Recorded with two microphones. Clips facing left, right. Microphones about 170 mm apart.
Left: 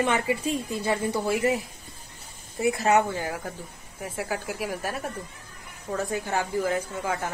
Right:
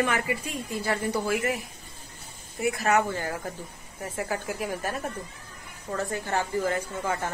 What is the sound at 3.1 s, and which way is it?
A woman's voice, 15° left (ahead or behind).